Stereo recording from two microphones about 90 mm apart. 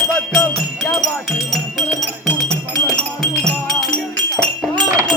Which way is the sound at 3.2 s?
5° left (ahead or behind).